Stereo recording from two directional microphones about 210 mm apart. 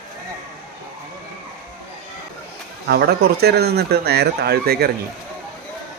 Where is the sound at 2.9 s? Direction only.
50° right (ahead or behind).